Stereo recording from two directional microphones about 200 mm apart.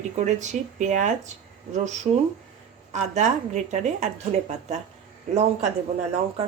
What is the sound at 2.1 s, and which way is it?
Speech, 20° right (ahead or behind).